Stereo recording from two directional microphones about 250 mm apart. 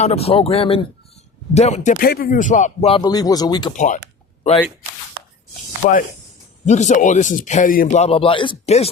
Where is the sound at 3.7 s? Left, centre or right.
Left.